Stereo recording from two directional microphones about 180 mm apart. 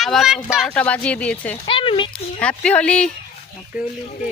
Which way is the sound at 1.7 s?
30° left (ahead or behind).